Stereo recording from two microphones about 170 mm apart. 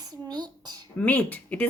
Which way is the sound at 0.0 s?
25° right (ahead or behind).